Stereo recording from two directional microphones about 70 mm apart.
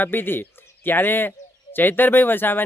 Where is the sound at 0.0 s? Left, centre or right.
Left.